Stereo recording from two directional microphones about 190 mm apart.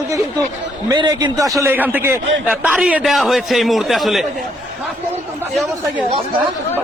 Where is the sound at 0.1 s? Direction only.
15° right (ahead or behind).